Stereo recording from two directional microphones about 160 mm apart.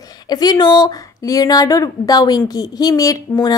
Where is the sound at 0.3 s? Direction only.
25° left (ahead or behind).